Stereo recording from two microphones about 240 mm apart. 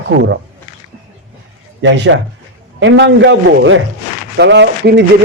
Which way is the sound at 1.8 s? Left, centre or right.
Right.